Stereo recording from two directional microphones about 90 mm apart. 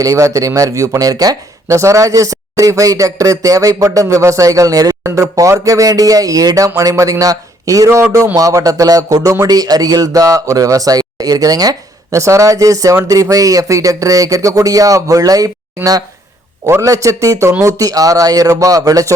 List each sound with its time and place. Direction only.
0.0 s a man's voice: 35° right (ahead or behind)